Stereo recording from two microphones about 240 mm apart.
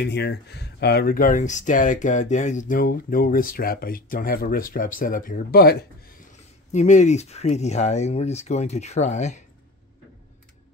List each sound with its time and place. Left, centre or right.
0.0 s speech: left